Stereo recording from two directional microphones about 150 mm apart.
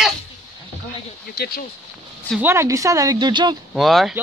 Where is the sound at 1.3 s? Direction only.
90° left.